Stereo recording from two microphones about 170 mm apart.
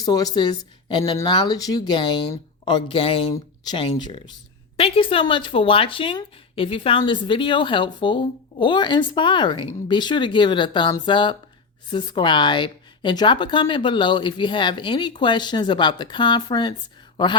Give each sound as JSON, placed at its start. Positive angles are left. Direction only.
{"t": 0.0, "sound": "speech", "side_deg": 25}
{"t": 3.3, "sound": "speech", "side_deg": 25}